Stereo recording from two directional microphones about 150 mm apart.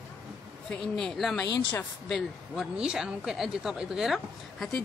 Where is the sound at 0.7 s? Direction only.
5° left (ahead or behind).